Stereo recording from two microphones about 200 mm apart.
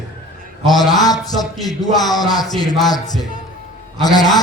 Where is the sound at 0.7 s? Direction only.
20° left (ahead or behind).